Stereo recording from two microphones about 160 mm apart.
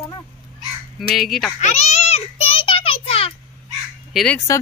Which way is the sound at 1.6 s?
45° left (ahead or behind).